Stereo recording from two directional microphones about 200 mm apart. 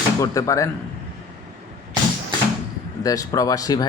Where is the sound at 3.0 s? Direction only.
15° left (ahead or behind).